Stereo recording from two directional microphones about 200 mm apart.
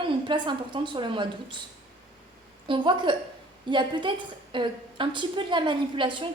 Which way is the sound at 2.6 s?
25° right (ahead or behind).